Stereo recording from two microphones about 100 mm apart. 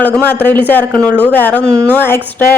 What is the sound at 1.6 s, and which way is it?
Speech, 30° right (ahead or behind).